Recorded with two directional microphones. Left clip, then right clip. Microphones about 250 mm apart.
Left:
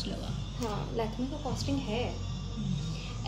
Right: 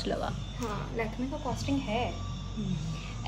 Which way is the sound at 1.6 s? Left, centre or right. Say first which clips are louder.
Right 2 dB; right.